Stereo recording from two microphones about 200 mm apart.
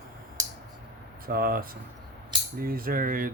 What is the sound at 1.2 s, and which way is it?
Speech, 45° right (ahead or behind).